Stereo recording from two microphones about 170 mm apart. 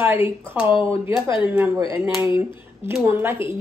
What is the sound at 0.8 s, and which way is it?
Speech, 15° right (ahead or behind).